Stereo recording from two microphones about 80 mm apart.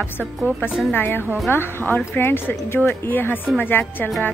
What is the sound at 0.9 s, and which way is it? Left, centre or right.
A woman's voice, left.